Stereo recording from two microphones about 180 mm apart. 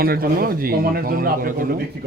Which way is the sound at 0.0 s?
55° right (ahead or behind).